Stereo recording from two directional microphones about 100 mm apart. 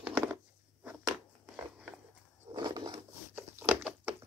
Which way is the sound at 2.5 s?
45° right (ahead or behind).